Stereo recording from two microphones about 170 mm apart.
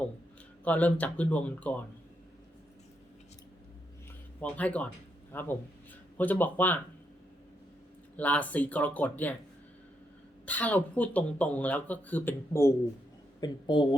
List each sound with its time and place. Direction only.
0.6 s speech: 10° left (ahead or behind)
4.4 s speech: 10° left (ahead or behind)
8.1 s speech: 10° left (ahead or behind)
10.4 s speech: 10° left (ahead or behind)
13.4 s speech: 25° left (ahead or behind)